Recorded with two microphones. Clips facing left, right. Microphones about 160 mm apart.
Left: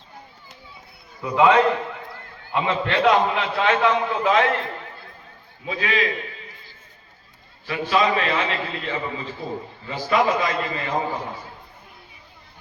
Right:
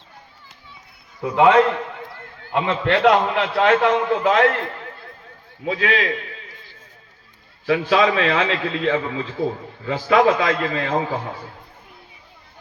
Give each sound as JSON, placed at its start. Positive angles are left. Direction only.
{"t": 1.2, "sound": "a man's voice", "side_deg": -50}
{"t": 5.6, "sound": "a man's voice", "side_deg": -70}
{"t": 7.7, "sound": "a man's voice", "side_deg": -90}